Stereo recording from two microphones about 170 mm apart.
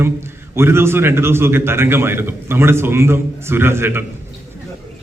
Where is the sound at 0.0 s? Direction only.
15° right (ahead or behind).